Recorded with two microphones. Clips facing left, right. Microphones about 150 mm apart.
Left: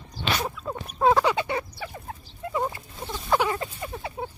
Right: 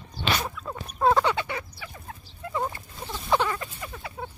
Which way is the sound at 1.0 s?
5° left (ahead or behind).